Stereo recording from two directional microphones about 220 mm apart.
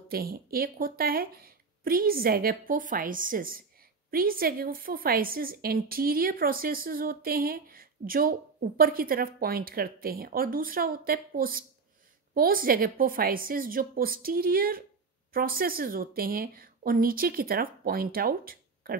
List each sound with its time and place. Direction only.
0.1 s a woman's voice: 40° right (ahead or behind)